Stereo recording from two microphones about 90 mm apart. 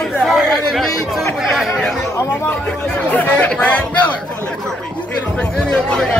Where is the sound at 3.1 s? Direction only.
20° left (ahead or behind).